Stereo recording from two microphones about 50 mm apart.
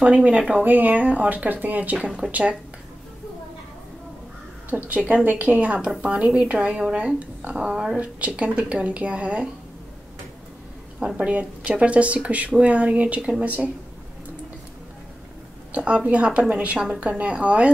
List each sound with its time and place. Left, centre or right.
0.0 s speech: right
4.6 s speech: right
7.7 s speech: centre
8.0 s speech: right
11.1 s speech: right
15.7 s speech: right